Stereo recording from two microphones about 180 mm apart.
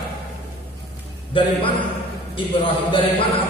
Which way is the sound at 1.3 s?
30° left (ahead or behind).